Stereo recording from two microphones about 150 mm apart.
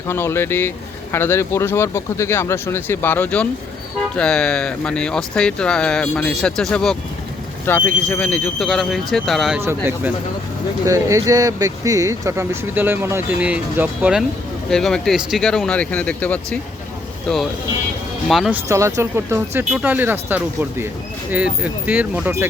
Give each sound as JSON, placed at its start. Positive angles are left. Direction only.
{"t": 0.1, "sound": "speech", "side_deg": 15}
{"t": 9.6, "sound": "speech", "side_deg": -15}
{"t": 14.7, "sound": "speech", "side_deg": 5}
{"t": 18.5, "sound": "speech", "side_deg": -20}